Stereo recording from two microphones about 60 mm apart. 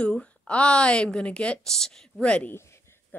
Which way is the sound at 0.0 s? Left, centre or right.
Centre.